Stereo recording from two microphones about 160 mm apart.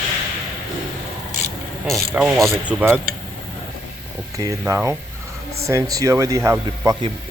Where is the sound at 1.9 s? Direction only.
20° right (ahead or behind).